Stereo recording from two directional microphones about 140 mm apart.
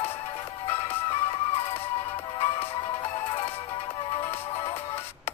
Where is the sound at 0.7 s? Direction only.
45° left (ahead or behind).